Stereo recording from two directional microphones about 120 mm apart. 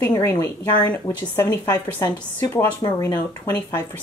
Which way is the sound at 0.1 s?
25° left (ahead or behind).